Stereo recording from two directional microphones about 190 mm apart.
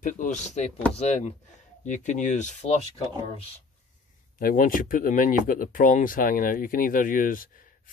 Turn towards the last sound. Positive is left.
turn(degrees=45)  # may be behind; listen again after turning